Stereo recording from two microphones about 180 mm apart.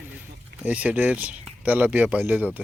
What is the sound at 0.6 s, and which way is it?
Speech, 5° right (ahead or behind).